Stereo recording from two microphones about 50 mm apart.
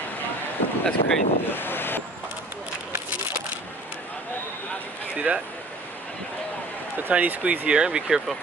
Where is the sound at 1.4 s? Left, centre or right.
Left.